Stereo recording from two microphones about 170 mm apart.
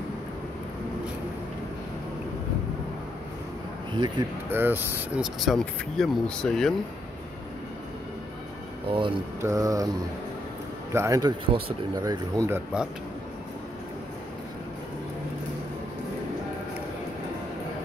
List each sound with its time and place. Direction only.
4.5 s speech: 10° right (ahead or behind)
8.8 s speech: 30° right (ahead or behind)
9.4 s mantra: 20° right (ahead or behind)
10.9 s mantra: 15° right (ahead or behind)
11.4 s speech: 30° right (ahead or behind)
11.9 s speech: 20° right (ahead or behind)